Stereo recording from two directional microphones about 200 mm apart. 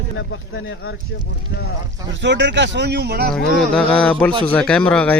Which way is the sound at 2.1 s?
65° right (ahead or behind).